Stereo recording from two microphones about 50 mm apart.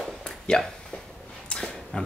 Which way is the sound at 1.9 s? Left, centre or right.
Centre.